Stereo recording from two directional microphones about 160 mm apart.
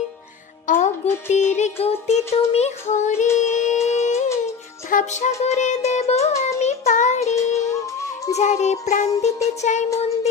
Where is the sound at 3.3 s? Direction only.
50° left (ahead or behind).